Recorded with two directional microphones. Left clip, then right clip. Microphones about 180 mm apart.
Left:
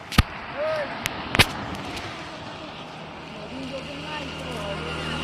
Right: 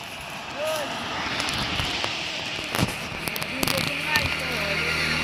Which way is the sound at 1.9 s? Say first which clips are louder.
Right 6 dB; 50° left (ahead or behind).